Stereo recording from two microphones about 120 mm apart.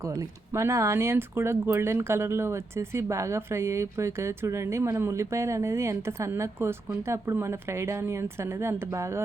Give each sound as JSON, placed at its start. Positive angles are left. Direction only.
{"t": 0.0, "sound": "speech", "side_deg": -25}